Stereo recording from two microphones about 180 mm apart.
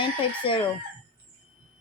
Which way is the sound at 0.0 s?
30° left (ahead or behind).